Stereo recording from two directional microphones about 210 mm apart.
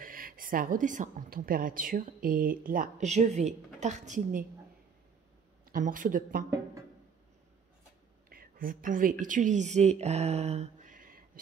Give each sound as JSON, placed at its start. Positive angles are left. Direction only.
{"t": 0.0, "sound": "a woman's voice", "side_deg": -40}
{"t": 5.7, "sound": "a woman's voice", "side_deg": -40}
{"t": 8.3, "sound": "a sound", "side_deg": -45}
{"t": 9.2, "sound": "speech", "side_deg": -35}